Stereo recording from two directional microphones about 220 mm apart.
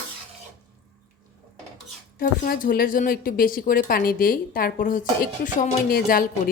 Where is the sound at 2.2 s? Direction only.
40° left (ahead or behind).